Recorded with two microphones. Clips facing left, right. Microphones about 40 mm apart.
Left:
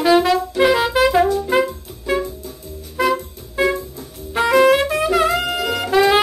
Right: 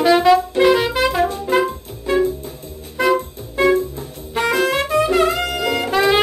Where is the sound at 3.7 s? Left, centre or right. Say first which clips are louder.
Right 8 dB; right.